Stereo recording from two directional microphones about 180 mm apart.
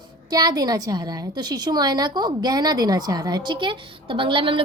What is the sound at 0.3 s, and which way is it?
A woman's voice, 20° right (ahead or behind).